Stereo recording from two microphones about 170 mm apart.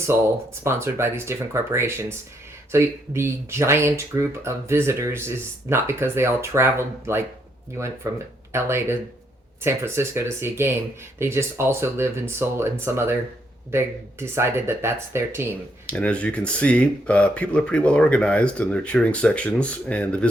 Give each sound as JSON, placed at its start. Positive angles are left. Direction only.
{"t": 0.6, "sound": "speech", "side_deg": -15}
{"t": 15.9, "sound": "speech", "side_deg": 5}